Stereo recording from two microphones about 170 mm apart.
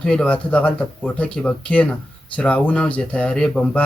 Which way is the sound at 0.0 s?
5° left (ahead or behind).